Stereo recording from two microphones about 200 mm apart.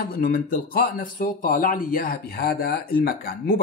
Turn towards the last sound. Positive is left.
turn(degrees=45)  # may be behind; listen again after turning